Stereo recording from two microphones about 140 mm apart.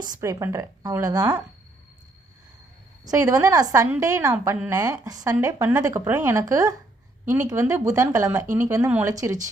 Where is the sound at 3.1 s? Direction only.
25° right (ahead or behind).